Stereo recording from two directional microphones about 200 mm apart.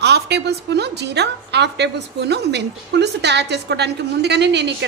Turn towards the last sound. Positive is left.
turn(degrees=-60)  # may be behind; listen again after turning